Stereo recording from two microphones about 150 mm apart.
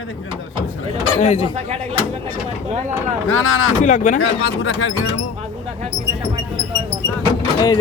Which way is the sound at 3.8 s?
60° left (ahead or behind).